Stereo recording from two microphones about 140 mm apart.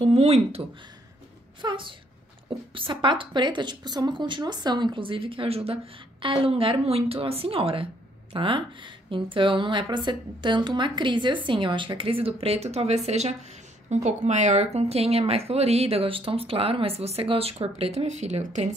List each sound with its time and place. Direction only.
0.0 s speech: 45° right (ahead or behind)
1.6 s a woman's voice: 35° right (ahead or behind); by 18.7 s 55° right (ahead or behind)